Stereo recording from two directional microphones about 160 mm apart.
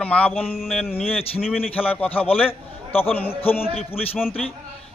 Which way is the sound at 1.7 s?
10° left (ahead or behind).